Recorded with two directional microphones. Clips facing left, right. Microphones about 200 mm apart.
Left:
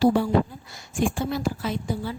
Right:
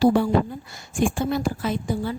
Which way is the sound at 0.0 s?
55° right (ahead or behind).